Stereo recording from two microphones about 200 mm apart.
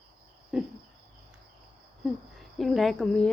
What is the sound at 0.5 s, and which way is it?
Speech, 5° right (ahead or behind).